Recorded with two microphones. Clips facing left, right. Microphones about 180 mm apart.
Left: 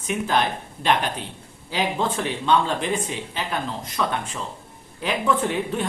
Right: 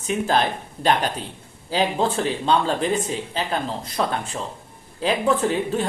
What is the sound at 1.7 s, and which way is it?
Speech, 35° right (ahead or behind).